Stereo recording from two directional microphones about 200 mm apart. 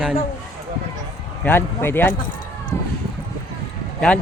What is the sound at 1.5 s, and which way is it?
Speech, 10° left (ahead or behind).